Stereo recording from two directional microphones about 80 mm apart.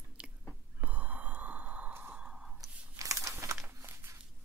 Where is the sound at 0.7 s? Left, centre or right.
Centre.